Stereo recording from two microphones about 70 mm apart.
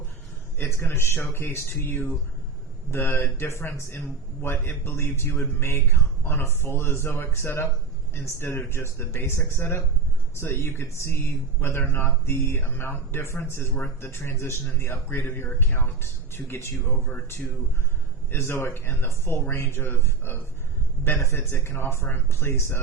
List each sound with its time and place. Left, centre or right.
0.6 s speech: left